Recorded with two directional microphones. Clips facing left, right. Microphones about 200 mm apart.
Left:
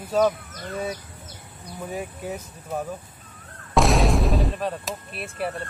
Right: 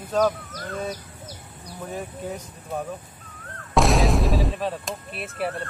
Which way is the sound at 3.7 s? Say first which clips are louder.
Even; centre (ahead or behind).